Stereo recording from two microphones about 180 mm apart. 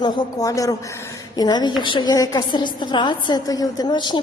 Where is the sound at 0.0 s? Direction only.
20° left (ahead or behind).